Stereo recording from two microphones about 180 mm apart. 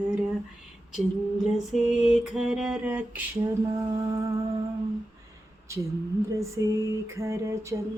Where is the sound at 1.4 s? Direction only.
Centre (ahead or behind).